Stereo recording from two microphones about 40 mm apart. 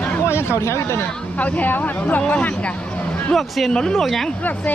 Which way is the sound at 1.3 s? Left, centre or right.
Left.